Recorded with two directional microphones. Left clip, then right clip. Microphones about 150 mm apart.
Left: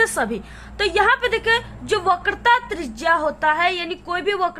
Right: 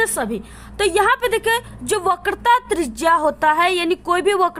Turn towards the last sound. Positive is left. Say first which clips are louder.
# right 5 dB
turn(degrees=-55)  # may be behind; listen again after turning